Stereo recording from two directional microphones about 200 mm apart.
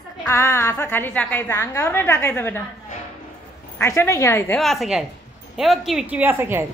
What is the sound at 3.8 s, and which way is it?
Speech, 15° left (ahead or behind).